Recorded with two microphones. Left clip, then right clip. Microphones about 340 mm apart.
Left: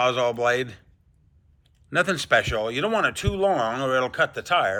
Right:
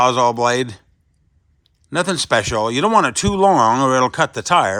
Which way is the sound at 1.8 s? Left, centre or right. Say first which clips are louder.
Right 3 dB; centre.